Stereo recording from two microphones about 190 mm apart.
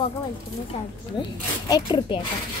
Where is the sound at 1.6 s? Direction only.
25° left (ahead or behind).